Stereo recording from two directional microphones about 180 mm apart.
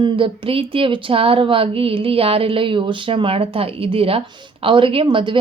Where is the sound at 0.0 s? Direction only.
30° right (ahead or behind).